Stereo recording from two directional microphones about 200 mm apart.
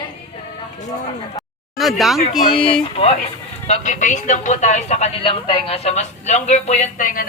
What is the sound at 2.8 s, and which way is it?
Speech, 30° left (ahead or behind).